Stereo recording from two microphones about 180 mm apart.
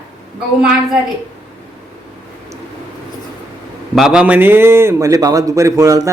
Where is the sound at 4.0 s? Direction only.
5° right (ahead or behind).